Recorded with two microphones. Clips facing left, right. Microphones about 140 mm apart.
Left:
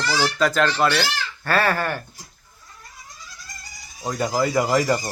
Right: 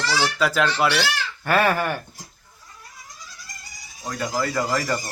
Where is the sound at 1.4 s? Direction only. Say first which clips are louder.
Right 1 dB; 15° right (ahead or behind).